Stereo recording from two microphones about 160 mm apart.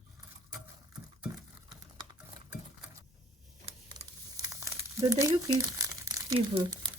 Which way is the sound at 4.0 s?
40° right (ahead or behind).